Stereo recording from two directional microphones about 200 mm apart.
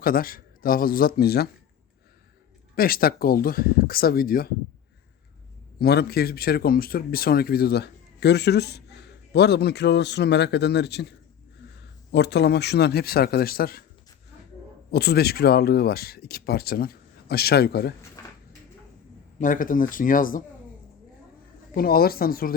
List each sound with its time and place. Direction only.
0.0 s speech: 45° left (ahead or behind)
2.7 s speech: 45° left (ahead or behind)
5.8 s speech: 55° left (ahead or behind)
14.8 s speech: 55° left (ahead or behind)
19.4 s speech: 40° left (ahead or behind)
21.8 s speech: 50° left (ahead or behind)